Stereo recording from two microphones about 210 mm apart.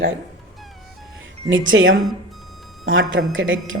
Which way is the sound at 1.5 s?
65° right (ahead or behind).